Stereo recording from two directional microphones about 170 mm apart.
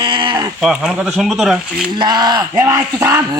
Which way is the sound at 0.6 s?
Centre (ahead or behind).